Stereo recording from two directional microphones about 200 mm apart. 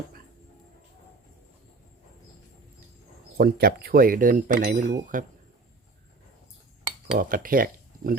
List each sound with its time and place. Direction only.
3.3 s speech: 50° right (ahead or behind)
7.2 s speech: 45° right (ahead or behind)